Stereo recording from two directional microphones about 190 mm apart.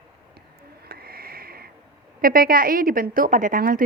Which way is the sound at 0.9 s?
55° right (ahead or behind).